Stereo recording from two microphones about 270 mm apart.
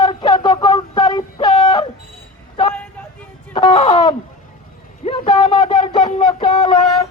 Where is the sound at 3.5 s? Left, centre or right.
Centre.